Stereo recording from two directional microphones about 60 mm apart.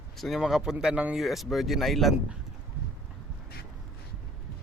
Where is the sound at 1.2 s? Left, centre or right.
Centre.